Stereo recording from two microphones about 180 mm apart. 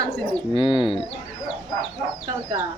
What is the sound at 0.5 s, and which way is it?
Speech, 30° left (ahead or behind).